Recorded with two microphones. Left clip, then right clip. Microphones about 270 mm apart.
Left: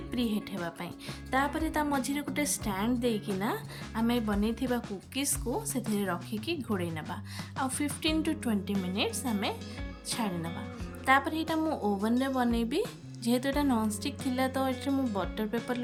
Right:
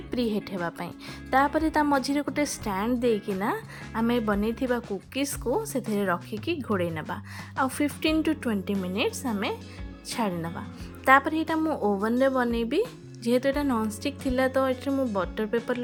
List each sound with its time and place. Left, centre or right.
0.1 s a woman's voice: centre